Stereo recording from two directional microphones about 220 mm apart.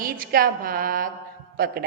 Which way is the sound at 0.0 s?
40° right (ahead or behind).